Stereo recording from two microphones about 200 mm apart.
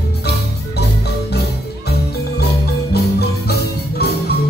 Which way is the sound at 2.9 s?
50° left (ahead or behind).